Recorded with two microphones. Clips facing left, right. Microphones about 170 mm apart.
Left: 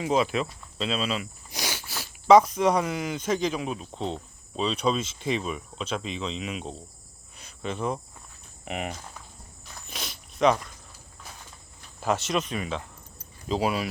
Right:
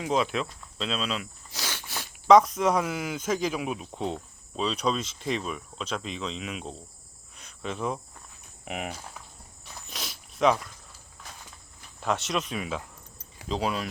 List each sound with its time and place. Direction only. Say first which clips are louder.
0.0 s speech: left 2 dB; centre (ahead or behind)
1.5 s a sound: left 3 dB; 15° left (ahead or behind)
1.9 s speech: left 1 dB; centre (ahead or behind)
4.6 s speech: left 2 dB; centre (ahead or behind)
7.3 s cricket: left 2 dB; centre (ahead or behind)
8.6 s speech: left 2 dB; centre (ahead or behind)
9.9 s zipper: left 2 dB; centre (ahead or behind)
11.9 s speech: left 2 dB; centre (ahead or behind)